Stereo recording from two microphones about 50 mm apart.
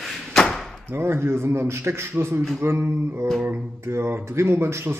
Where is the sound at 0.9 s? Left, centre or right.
Right.